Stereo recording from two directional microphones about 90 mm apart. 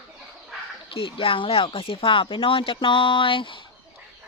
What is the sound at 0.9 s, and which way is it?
Speech, 75° left (ahead or behind).